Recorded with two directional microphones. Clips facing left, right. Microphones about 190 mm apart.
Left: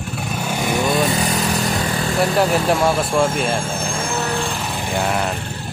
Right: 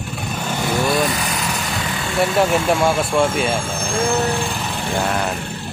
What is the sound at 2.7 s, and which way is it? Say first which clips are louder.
Speech: even; centre (ahead or behind).